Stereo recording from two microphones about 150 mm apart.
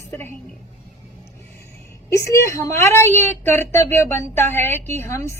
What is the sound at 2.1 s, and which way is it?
A woman's voice, 20° left (ahead or behind).